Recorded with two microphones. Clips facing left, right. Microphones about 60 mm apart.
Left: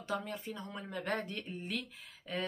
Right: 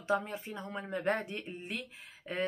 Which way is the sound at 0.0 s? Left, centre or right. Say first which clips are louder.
Right 5 dB; right.